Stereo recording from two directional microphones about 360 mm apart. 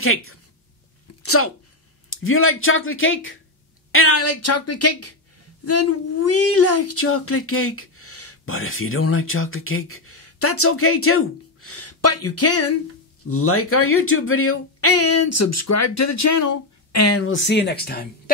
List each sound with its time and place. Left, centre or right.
0.0 s a woman's voice: left